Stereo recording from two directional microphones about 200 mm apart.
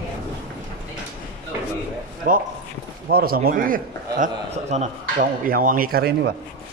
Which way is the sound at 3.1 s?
50° right (ahead or behind).